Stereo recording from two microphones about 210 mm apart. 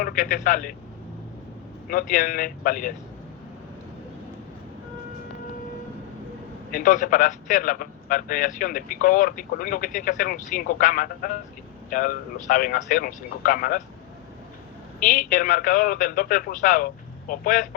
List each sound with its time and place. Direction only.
0.0 s a man's voice: 40° left (ahead or behind)
1.9 s a man's voice: 40° left (ahead or behind)
6.7 s a man's voice: 40° left (ahead or behind)
15.0 s a man's voice: 40° left (ahead or behind)